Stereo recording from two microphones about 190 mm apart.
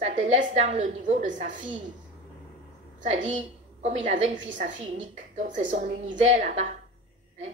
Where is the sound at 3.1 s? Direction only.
40° right (ahead or behind).